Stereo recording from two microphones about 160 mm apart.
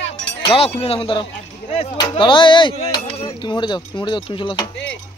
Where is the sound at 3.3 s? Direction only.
25° left (ahead or behind).